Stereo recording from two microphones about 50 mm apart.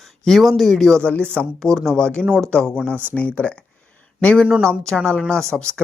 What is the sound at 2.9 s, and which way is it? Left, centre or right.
Speech, right.